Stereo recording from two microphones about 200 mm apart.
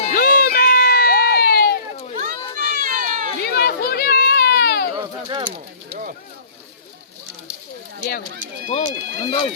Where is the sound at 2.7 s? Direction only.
45° right (ahead or behind).